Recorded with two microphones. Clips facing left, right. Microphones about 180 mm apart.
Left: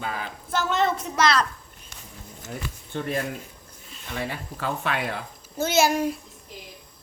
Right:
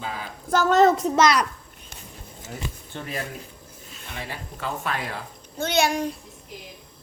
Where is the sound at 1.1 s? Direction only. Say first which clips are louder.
Right 3 dB; 15° right (ahead or behind).